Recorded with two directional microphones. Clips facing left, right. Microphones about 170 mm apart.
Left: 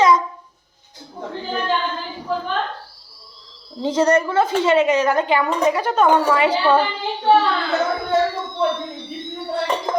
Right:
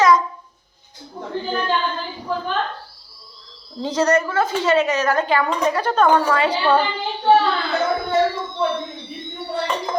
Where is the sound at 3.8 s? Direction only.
25° left (ahead or behind); by 6.8 s 10° left (ahead or behind).